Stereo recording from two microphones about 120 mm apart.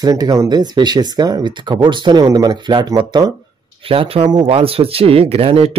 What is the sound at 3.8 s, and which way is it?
Speech, 50° right (ahead or behind).